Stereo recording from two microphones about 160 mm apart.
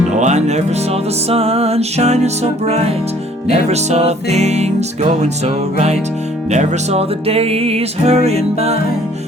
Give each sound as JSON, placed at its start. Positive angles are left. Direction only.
{"t": 0.2, "sound": "music", "side_deg": -45}
{"t": 5.7, "sound": "music", "side_deg": -45}